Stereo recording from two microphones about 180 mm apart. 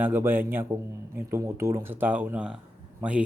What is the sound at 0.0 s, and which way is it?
Speech, 10° right (ahead or behind).